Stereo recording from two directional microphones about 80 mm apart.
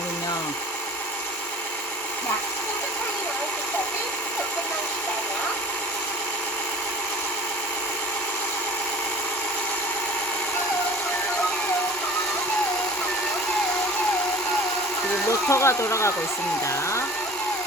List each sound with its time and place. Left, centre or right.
15.3 s speech: left